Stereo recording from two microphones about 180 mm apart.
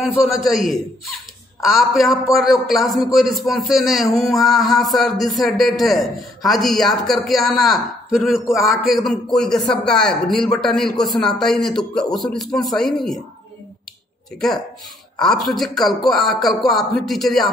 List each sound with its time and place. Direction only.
0.0 s a man's voice: centre (ahead or behind)
15.1 s speech: 5° left (ahead or behind)